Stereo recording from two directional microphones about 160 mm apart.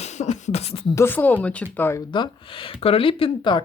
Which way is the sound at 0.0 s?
45° left (ahead or behind).